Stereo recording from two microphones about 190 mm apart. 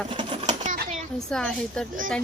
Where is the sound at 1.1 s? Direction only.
5° left (ahead or behind).